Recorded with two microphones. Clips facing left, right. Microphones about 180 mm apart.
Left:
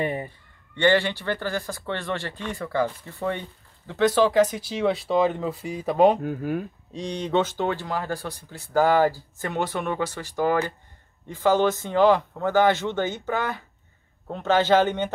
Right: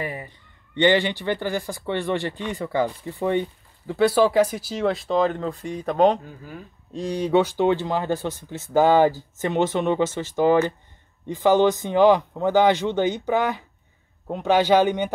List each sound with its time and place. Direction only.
0.0 s a man's voice: 25° left (ahead or behind)
0.7 s speech: 15° right (ahead or behind); by 6.1 s 5° left (ahead or behind)
6.2 s speech: 60° left (ahead or behind)
6.9 s speech: 5° right (ahead or behind)